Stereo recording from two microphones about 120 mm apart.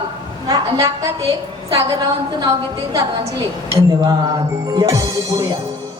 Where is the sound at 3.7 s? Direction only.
30° right (ahead or behind).